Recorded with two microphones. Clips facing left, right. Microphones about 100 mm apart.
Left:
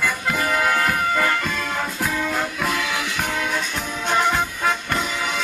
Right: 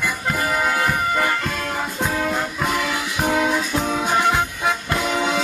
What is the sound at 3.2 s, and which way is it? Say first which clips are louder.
Music: right 6 dB; 25° right (ahead or behind).